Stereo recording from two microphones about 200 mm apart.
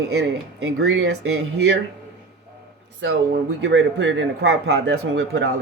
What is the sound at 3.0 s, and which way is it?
Speech, 65° right (ahead or behind).